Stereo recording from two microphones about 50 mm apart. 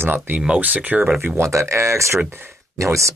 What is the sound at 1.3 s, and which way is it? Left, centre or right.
Speech, right.